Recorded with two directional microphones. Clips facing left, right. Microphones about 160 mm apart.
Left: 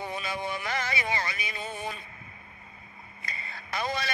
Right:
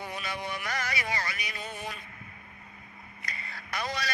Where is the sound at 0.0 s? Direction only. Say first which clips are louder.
Left 3 dB; 25° left (ahead or behind).